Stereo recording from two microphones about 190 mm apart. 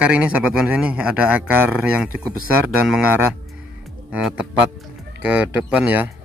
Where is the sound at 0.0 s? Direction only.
5° right (ahead or behind).